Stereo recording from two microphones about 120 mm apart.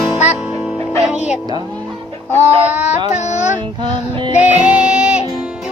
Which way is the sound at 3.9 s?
40° right (ahead or behind).